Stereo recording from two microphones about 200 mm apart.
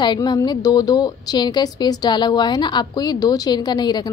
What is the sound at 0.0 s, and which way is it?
A woman's voice, 20° left (ahead or behind).